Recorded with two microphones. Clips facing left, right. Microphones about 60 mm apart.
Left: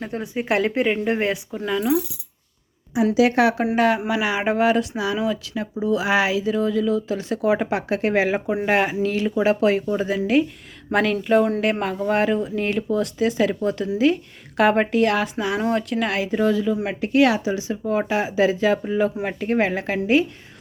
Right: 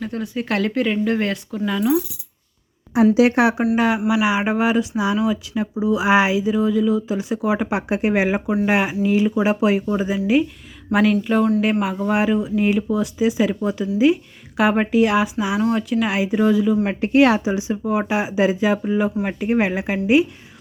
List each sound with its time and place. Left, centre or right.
0.0 s speech: left; by 2.0 s centre
3.2 s speech: right
3.8 s a woman's voice: centre
6.1 s a woman's voice: right; by 7.7 s centre
7.7 s a woman's voice: centre
16.8 s a woman's voice: right